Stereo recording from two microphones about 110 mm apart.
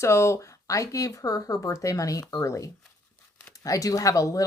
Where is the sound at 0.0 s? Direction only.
25° left (ahead or behind).